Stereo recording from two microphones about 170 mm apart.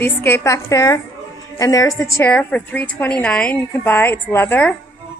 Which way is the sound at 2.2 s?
10° left (ahead or behind).